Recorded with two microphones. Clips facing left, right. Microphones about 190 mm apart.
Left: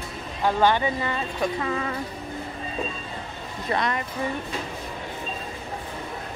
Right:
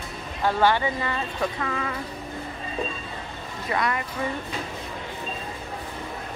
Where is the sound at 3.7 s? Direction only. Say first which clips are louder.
Even; 25° left (ahead or behind).